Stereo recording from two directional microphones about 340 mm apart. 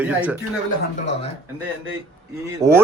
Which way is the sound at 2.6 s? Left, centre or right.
Centre.